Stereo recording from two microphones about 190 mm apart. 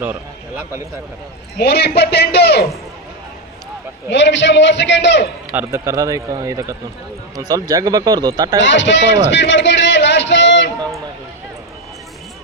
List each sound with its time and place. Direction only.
0.0 s a man's voice: 10° right (ahead or behind)
1.5 s a man's voice: 60° left (ahead or behind)
4.1 s a man's voice: 70° left (ahead or behind)
5.5 s a man's voice: 15° right (ahead or behind)
8.6 s a man's voice: 70° left (ahead or behind)
9.3 s a sound: 70° left (ahead or behind)